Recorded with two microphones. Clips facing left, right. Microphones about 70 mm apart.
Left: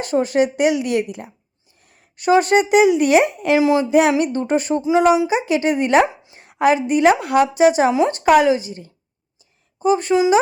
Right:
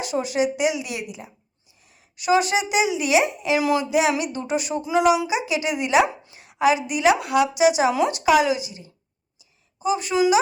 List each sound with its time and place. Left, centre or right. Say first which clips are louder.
0.0 s speech: left 5 dB; left
3.6 s speech: left 5 dB; left
3.8 s a woman's voice: left 6 dB; left
4.8 s speech: left 4 dB; left
5.5 s a woman's voice: left 6 dB; left